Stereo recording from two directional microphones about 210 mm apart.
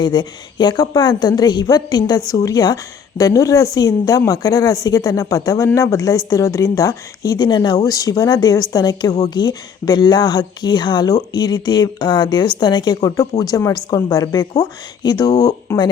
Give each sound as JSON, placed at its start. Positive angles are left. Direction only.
{"t": 0.0, "sound": "speech", "side_deg": 20}